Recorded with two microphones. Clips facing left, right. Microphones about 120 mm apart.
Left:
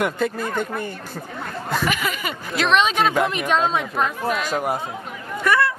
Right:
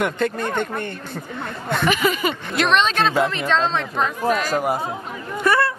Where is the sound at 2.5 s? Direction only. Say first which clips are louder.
Left 1 dB; 5° left (ahead or behind).